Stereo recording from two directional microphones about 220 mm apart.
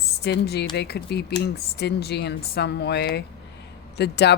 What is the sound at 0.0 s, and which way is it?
A woman's voice, 45° left (ahead or behind).